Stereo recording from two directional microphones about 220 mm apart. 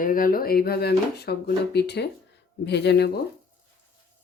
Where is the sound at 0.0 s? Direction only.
40° left (ahead or behind).